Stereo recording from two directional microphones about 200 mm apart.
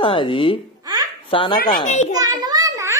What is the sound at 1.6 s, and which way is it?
Speech, 45° left (ahead or behind).